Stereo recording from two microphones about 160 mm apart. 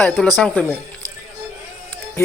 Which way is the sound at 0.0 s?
5° left (ahead or behind).